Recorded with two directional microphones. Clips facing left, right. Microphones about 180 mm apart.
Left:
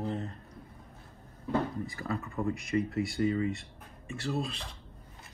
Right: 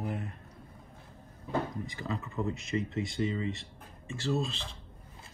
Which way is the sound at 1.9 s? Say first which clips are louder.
Left 1 dB; 20° right (ahead or behind).